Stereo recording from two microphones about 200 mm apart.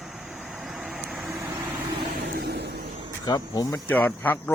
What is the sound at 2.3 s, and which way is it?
Vehicle, 55° right (ahead or behind).